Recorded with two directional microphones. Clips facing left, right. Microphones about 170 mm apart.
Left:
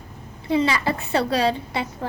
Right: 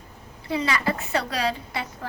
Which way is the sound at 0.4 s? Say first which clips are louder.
Left 4 dB; 25° left (ahead or behind).